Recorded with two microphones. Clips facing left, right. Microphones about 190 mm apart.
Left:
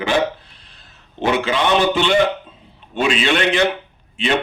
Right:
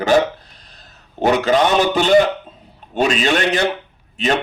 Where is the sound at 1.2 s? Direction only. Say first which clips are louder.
Right 3 dB; 40° right (ahead or behind).